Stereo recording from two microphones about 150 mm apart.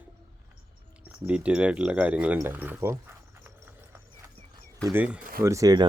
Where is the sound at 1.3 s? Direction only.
5° right (ahead or behind).